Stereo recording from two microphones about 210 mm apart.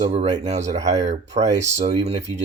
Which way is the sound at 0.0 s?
30° right (ahead or behind).